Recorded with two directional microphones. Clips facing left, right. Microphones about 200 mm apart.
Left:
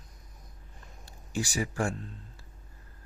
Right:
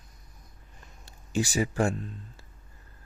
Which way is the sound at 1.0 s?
20° right (ahead or behind).